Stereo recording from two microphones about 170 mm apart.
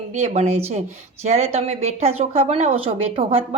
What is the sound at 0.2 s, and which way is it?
Speech, 40° right (ahead or behind).